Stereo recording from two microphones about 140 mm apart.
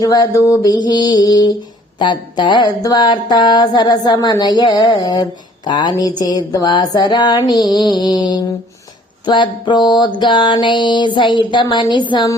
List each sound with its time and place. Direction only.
0.0 s mantra: 25° left (ahead or behind)